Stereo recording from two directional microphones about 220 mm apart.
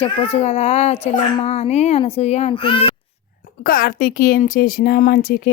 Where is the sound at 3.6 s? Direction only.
40° left (ahead or behind).